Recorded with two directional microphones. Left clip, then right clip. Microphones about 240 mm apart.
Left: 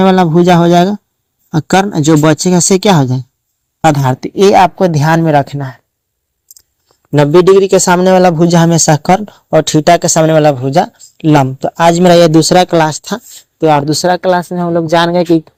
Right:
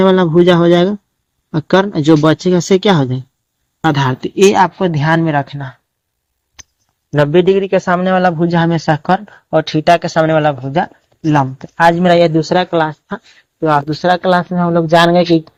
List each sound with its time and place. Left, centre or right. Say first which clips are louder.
0.0 s speech: left 1 dB; left
7.1 s speech: left 5 dB; left